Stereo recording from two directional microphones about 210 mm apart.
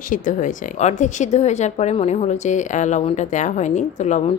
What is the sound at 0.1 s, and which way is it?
Speech, 40° left (ahead or behind).